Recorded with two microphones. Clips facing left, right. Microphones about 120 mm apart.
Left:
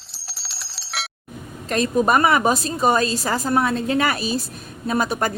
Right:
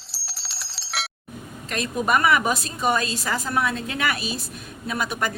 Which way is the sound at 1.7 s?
35° left (ahead or behind).